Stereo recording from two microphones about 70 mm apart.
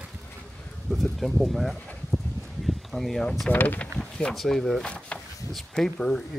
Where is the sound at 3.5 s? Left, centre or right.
Left.